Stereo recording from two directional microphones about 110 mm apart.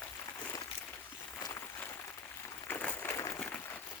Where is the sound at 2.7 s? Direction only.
15° left (ahead or behind).